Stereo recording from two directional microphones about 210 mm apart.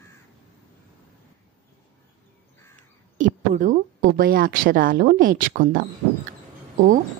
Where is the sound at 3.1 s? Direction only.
35° right (ahead or behind).